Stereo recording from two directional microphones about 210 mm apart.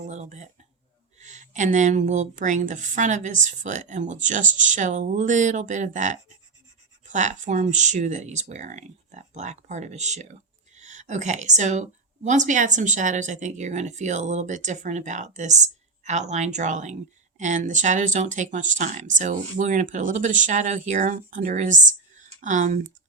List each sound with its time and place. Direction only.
0.1 s a woman's voice: 35° right (ahead or behind)